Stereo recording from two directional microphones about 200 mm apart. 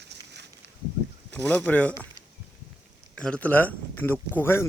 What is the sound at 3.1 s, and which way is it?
Speech, 5° left (ahead or behind).